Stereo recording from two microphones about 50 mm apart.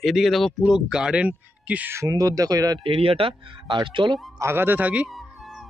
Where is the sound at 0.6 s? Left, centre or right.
Centre; by 1.9 s right.